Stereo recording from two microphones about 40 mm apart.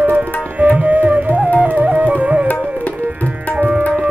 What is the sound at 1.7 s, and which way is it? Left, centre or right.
Flute, right.